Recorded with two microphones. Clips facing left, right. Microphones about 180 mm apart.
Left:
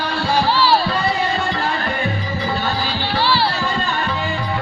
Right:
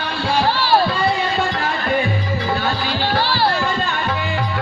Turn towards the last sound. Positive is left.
turn(degrees=-45)  # may be behind; listen again after turning